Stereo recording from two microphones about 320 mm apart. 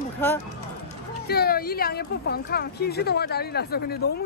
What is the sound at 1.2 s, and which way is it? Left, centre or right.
Speech, left.